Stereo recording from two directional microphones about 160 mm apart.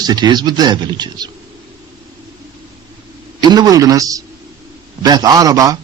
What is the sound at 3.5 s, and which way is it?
Speech, 25° right (ahead or behind).